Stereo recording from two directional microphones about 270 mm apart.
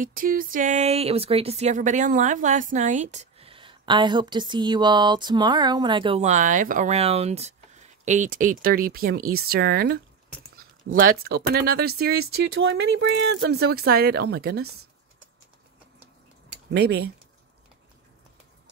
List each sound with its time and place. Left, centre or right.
0.0 s speech: right
16.7 s speech: right